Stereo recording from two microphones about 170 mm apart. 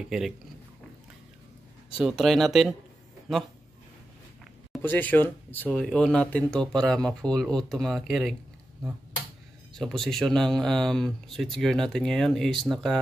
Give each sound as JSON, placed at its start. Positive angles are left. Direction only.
{"t": 0.0, "sound": "speech", "side_deg": 0}
{"t": 2.0, "sound": "speech", "side_deg": -5}
{"t": 4.8, "sound": "speech", "side_deg": 10}
{"t": 9.8, "sound": "speech", "side_deg": 0}